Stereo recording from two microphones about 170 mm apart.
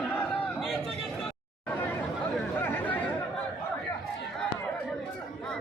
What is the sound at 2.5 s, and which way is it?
Chatter, 10° left (ahead or behind).